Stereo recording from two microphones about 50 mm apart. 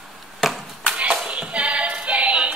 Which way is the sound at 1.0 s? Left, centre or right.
Right.